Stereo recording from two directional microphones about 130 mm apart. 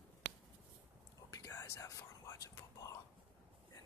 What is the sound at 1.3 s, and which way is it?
Whispering, 25° left (ahead or behind).